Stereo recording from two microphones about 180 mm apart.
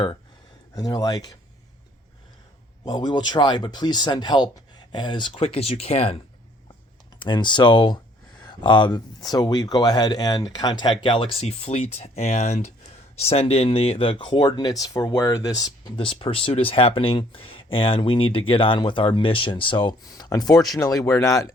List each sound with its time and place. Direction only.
0.8 s speech: 20° left (ahead or behind)
2.8 s speech: 25° left (ahead or behind)
7.2 s speech: 25° left (ahead or behind)